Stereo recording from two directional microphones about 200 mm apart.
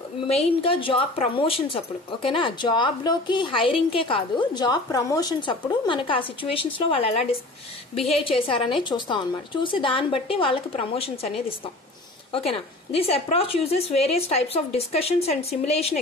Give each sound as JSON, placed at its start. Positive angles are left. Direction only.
{"t": 0.3, "sound": "a woman's voice", "side_deg": 30}